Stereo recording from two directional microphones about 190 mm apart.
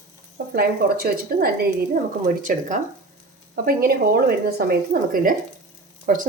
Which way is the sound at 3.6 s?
55° right (ahead or behind).